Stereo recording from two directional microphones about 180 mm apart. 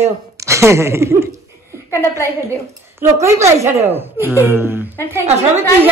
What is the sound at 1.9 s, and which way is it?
Speech, 15° left (ahead or behind).